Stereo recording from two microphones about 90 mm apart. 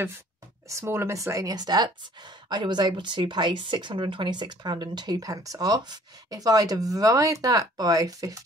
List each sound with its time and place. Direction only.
0.7 s speech: 30° right (ahead or behind)